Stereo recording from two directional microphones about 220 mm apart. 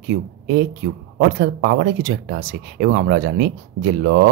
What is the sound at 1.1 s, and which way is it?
Speech, 50° right (ahead or behind).